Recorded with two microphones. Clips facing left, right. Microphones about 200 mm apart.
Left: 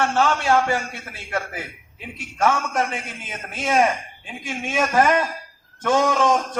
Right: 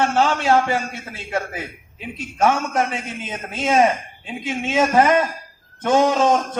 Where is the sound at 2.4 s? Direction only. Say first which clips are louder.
Right 2 dB; 20° right (ahead or behind).